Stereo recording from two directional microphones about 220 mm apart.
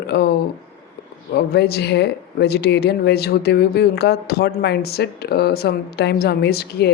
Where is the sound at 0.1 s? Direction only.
50° left (ahead or behind).